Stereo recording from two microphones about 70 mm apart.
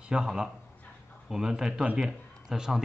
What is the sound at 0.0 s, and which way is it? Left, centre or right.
A man's voice, centre.